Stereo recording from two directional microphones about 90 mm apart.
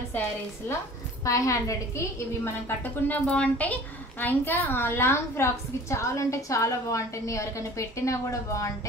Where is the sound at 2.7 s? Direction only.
20° left (ahead or behind); by 8.7 s 35° left (ahead or behind).